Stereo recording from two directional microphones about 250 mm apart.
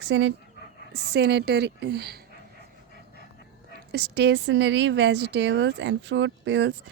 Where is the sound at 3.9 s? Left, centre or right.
Right.